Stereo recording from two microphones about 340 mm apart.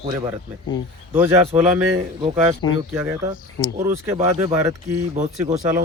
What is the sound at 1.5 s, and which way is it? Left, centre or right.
Speech, centre.